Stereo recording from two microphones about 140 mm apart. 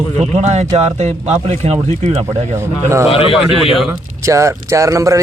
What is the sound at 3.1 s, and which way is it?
Speech, 40° left (ahead or behind).